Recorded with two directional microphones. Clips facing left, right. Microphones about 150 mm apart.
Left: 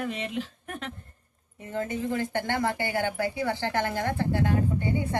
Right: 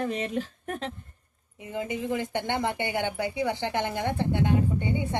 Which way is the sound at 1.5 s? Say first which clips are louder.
Left 1 dB; 15° right (ahead or behind).